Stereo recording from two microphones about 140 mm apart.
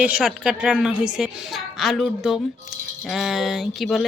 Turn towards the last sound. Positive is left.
turn(degrees=0)  # may be behind; listen again after turning